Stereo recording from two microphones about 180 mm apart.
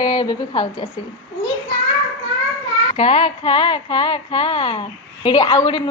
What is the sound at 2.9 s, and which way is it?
Speech, 30° left (ahead or behind).